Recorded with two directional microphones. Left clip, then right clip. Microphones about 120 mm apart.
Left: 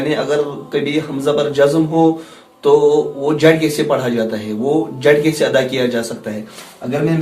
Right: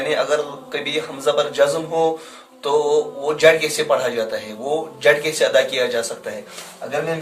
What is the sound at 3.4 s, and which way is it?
Speech, 40° right (ahead or behind).